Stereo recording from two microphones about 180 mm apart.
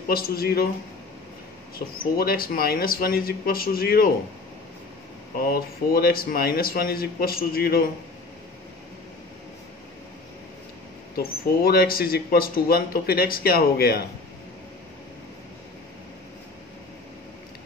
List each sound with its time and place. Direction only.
0.1 s speech: 55° left (ahead or behind)
1.8 s speech: 45° left (ahead or behind)
5.4 s speech: 55° left (ahead or behind)
11.1 s speech: 55° left (ahead or behind)